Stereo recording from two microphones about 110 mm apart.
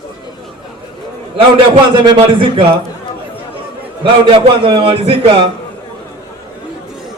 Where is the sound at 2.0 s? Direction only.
45° right (ahead or behind).